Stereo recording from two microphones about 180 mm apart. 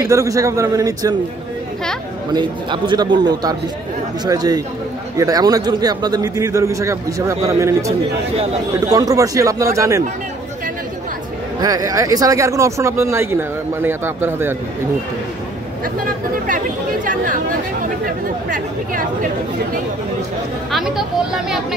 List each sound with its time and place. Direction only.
0.0 s a man's voice: 20° right (ahead or behind)
2.3 s a man's voice: 25° right (ahead or behind)
8.9 s speech: 20° right (ahead or behind)
11.6 s speech: 20° right (ahead or behind)
16.4 s speech: 45° right (ahead or behind)
20.7 s speech: 5° right (ahead or behind)